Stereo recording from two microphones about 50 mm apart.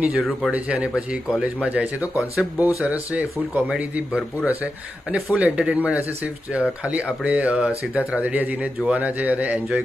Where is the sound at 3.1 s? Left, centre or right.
Right.